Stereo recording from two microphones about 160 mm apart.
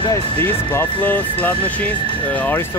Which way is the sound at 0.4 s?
10° left (ahead or behind).